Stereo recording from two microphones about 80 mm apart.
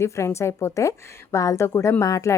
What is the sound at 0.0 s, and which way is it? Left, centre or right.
A woman's voice, left.